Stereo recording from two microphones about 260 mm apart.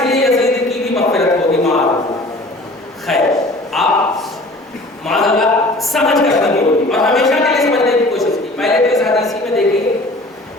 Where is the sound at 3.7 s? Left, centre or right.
Centre.